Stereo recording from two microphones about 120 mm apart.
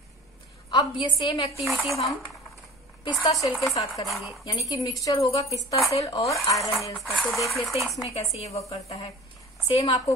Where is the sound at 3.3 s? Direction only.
Centre (ahead or behind).